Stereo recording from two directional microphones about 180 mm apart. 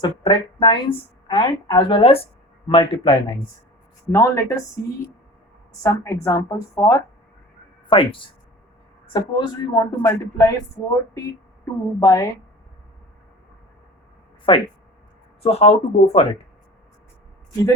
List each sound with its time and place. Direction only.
0.0 s speech: 25° left (ahead or behind)
4.1 s a woman's voice: 15° left (ahead or behind)
5.8 s a woman's voice: 15° left (ahead or behind)
7.9 s speech: 30° left (ahead or behind)
9.7 s a woman's voice: 20° left (ahead or behind)
14.5 s speech: 30° left (ahead or behind)